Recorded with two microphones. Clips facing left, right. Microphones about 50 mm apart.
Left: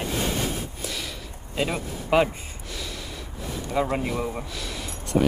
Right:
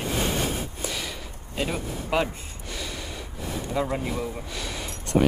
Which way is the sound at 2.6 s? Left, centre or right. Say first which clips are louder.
Right 2 dB; centre.